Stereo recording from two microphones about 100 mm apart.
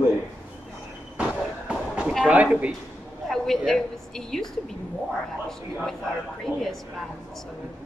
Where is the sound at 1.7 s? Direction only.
10° right (ahead or behind).